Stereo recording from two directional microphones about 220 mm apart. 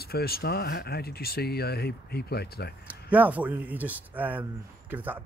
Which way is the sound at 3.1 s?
5° right (ahead or behind).